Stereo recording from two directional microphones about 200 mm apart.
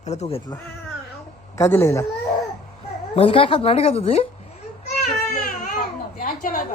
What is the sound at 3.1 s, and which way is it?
A woman's voice, 30° left (ahead or behind).